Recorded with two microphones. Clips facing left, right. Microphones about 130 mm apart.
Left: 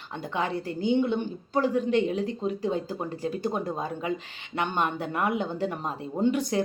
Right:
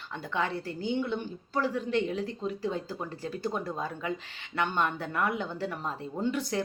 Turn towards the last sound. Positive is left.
turn(degrees=15)  # may be behind; listen again after turning